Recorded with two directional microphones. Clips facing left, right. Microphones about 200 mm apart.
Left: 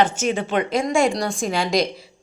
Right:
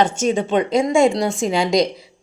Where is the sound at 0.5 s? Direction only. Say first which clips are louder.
Right 4 dB; 20° right (ahead or behind).